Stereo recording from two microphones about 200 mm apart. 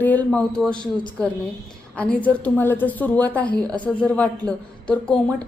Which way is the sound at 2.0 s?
5° left (ahead or behind).